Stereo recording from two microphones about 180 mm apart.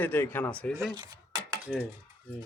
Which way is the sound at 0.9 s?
20° right (ahead or behind).